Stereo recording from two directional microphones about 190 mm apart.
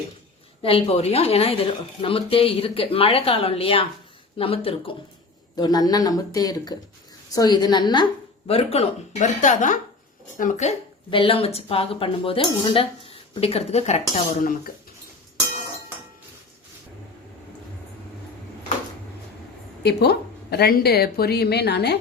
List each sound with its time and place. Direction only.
0.6 s a woman's voice: 30° left (ahead or behind)
19.8 s a woman's voice: 60° left (ahead or behind)